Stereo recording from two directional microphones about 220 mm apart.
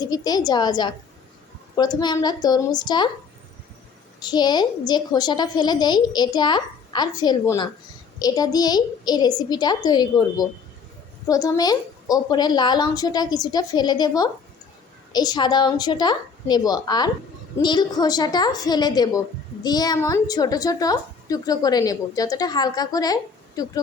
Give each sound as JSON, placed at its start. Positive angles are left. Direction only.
{"t": 0.0, "sound": "a woman's voice", "side_deg": 15}
{"t": 4.2, "sound": "a woman's voice", "side_deg": 20}